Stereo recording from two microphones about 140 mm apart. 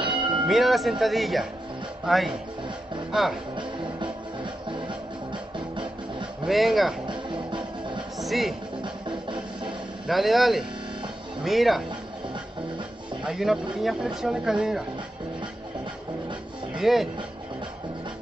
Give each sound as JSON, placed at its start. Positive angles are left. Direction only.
{"t": 0.0, "sound": "music", "side_deg": -35}
{"t": 0.5, "sound": "speech", "side_deg": 0}
{"t": 3.5, "sound": "music", "side_deg": -35}
{"t": 6.4, "sound": "speech", "side_deg": 0}
{"t": 7.1, "sound": "music", "side_deg": -35}
{"t": 8.2, "sound": "speech", "side_deg": 0}
{"t": 8.8, "sound": "music", "side_deg": -35}
{"t": 10.0, "sound": "speech", "side_deg": 0}
{"t": 13.2, "sound": "speech", "side_deg": 0}
{"t": 16.7, "sound": "speech", "side_deg": 0}